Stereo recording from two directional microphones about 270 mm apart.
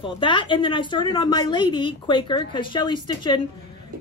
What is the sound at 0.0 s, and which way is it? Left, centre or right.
A woman's voice, centre.